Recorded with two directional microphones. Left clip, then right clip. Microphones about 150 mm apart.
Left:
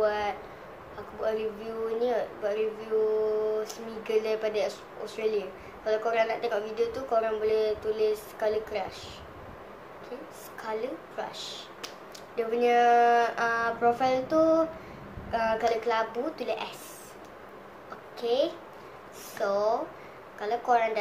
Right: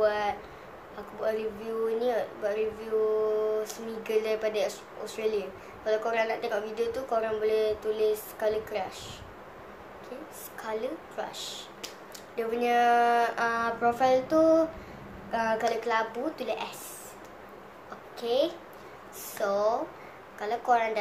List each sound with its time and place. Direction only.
0.0 s a sound: 10° right (ahead or behind)
1.2 s a woman's voice: 10° right (ahead or behind)
10.6 s a woman's voice: 5° right (ahead or behind)
18.2 s a woman's voice: 5° right (ahead or behind)